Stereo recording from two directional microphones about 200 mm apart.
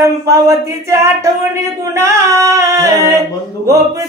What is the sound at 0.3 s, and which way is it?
Speech, 15° right (ahead or behind).